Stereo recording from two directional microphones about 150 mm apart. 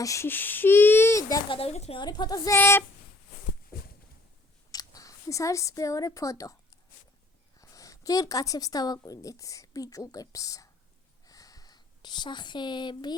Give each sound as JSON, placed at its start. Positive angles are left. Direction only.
{"t": 0.0, "sound": "a child's voice", "side_deg": 20}
{"t": 1.5, "sound": "a woman's voice", "side_deg": 40}
{"t": 2.0, "sound": "speech", "side_deg": 30}
{"t": 4.7, "sound": "a woman's voice", "side_deg": 25}
{"t": 11.3, "sound": "a sound", "side_deg": 25}